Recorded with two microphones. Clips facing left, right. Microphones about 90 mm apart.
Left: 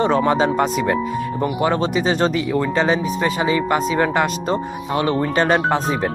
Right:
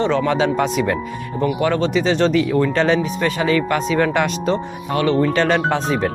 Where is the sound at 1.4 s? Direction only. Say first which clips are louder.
Right 2 dB; 15° left (ahead or behind).